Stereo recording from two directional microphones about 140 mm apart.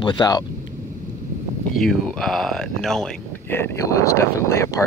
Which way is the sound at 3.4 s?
15° left (ahead or behind).